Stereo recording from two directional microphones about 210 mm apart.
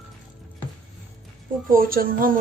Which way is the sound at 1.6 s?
45° right (ahead or behind).